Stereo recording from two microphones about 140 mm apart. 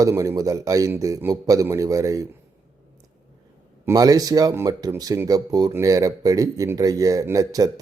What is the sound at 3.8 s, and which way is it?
A man's voice, 25° right (ahead or behind).